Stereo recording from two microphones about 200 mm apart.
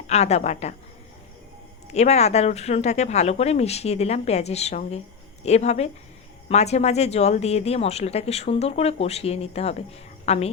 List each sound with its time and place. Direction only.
0.1 s speech: 35° left (ahead or behind)
1.9 s speech: 35° left (ahead or behind)